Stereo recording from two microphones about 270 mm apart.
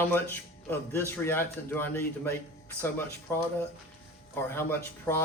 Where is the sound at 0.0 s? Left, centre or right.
Centre.